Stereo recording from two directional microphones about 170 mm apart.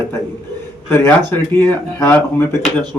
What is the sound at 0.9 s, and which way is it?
Speech, 15° left (ahead or behind).